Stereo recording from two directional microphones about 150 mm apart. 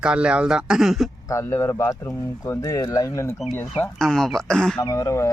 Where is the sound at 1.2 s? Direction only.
20° left (ahead or behind).